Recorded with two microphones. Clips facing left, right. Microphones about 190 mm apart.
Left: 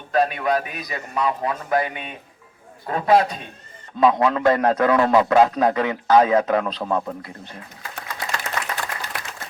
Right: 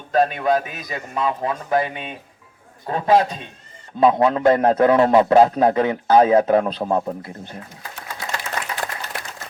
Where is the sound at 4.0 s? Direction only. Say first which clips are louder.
Right 2 dB; 25° right (ahead or behind).